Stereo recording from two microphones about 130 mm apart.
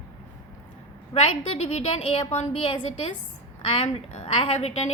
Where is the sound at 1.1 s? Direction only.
55° left (ahead or behind).